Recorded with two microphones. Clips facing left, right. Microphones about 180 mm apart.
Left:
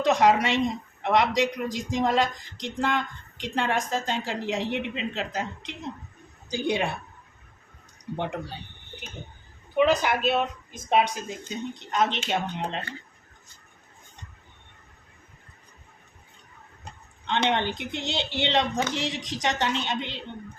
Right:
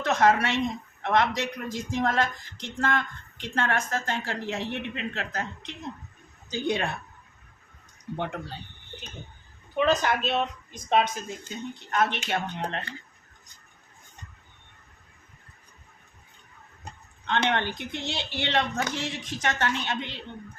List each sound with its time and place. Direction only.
0.0 s a woman's voice: 15° left (ahead or behind)
8.1 s a woman's voice: 15° left (ahead or behind)
9.7 s a woman's voice: 10° left (ahead or behind)
17.2 s a woman's voice: 15° left (ahead or behind)